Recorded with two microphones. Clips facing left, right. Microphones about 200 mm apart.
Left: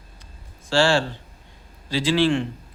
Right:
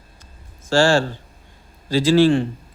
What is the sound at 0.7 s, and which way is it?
A man's voice, 45° right (ahead or behind).